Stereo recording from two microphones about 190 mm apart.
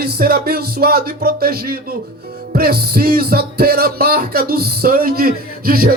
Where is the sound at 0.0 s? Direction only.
55° right (ahead or behind).